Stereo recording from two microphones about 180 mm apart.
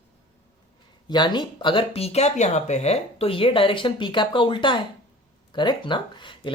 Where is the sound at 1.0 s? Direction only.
25° left (ahead or behind).